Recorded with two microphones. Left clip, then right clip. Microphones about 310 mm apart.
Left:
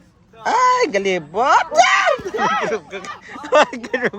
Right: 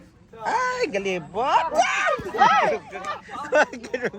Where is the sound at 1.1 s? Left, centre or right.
Left.